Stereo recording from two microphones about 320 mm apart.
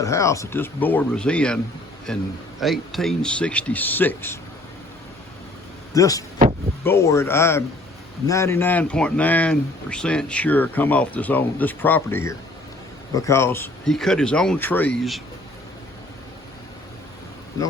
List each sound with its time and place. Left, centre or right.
0.0 s speech: centre
5.9 s speech: centre